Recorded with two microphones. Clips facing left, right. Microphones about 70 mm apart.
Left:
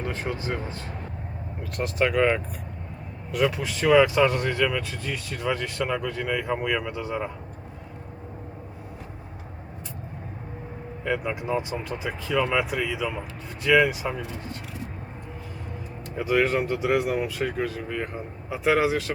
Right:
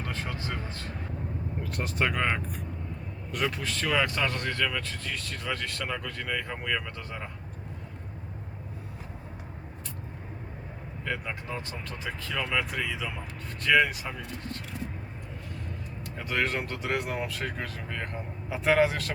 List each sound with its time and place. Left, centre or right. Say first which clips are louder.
0.0 s speech: left 5 dB; left
1.6 s speech: left 5 dB; centre
11.0 s speech: left 7 dB; centre
16.1 s speech: left 7 dB; centre